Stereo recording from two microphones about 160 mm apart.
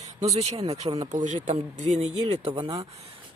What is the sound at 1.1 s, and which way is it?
Speech, 50° right (ahead or behind).